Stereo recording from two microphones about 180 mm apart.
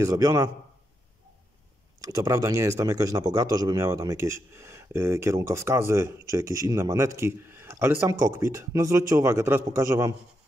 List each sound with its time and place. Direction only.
0.0 s a man's voice: 20° right (ahead or behind)
2.0 s speech: 20° right (ahead or behind)